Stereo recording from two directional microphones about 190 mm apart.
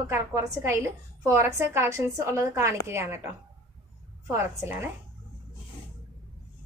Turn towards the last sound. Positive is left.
turn(degrees=-10)  # may be behind; listen again after turning